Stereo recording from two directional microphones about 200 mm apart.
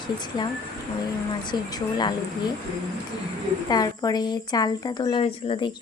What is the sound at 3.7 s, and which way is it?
Speech, 20° left (ahead or behind).